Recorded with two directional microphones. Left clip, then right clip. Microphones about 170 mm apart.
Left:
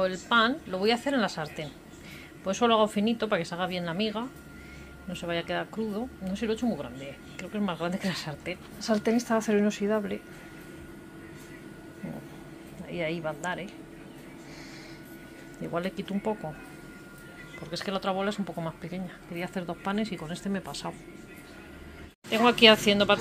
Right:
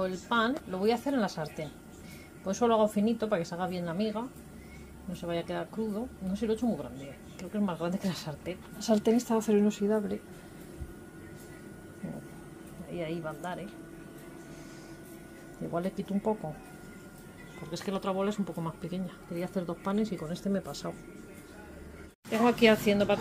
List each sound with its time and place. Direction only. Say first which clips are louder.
0.0 s speech: left 5 dB; centre (ahead or behind)
8.7 s a woman's voice: even; 25° right (ahead or behind)
9.1 s speech: left 1 dB; 15° right (ahead or behind)
12.9 s speech: left 5 dB; 10° left (ahead or behind)
15.7 s speech: left 2 dB; 10° right (ahead or behind)
17.6 s speech: left 3 dB; 10° right (ahead or behind)
19.5 s speech: left 1 dB; 10° left (ahead or behind)
20.0 s speech: even; 10° right (ahead or behind)
22.3 s speech: left 5 dB; centre (ahead or behind)